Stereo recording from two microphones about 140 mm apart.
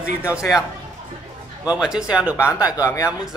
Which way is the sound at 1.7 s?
5° right (ahead or behind).